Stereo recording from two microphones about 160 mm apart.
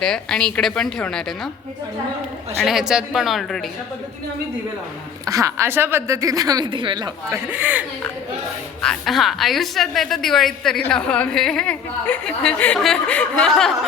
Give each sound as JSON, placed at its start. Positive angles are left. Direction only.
{"t": 0.0, "sound": "a woman's voice", "side_deg": 5}
{"t": 2.6, "sound": "a woman's voice", "side_deg": 0}
{"t": 5.2, "sound": "a woman's voice", "side_deg": -20}
{"t": 7.5, "sound": "speech", "side_deg": -10}
{"t": 8.8, "sound": "a woman's voice", "side_deg": 5}